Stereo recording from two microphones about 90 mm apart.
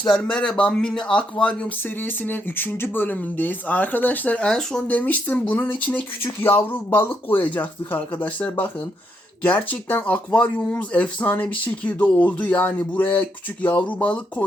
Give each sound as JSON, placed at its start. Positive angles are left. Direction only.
{"t": 0.1, "sound": "speech", "side_deg": 10}
{"t": 4.9, "sound": "speech", "side_deg": 20}